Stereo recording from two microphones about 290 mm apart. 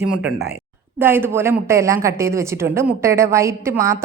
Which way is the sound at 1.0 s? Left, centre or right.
Centre.